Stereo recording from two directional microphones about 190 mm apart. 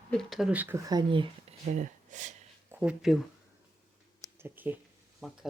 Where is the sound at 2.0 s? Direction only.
40° right (ahead or behind).